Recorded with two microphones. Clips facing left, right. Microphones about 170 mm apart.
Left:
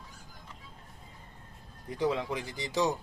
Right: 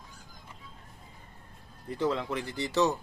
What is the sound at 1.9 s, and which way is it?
Speech, 15° left (ahead or behind).